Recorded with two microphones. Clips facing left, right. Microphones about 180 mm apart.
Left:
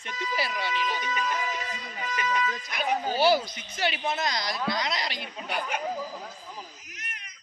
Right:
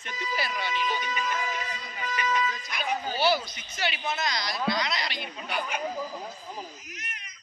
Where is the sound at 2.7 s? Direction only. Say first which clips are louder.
Left 7 dB; 50° left (ahead or behind).